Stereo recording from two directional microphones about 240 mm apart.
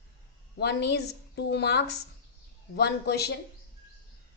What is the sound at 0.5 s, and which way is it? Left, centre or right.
A woman's voice, left.